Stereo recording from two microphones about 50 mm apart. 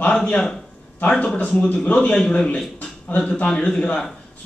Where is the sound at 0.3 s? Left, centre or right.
Centre.